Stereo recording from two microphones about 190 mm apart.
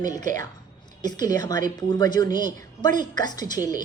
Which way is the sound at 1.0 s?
20° left (ahead or behind).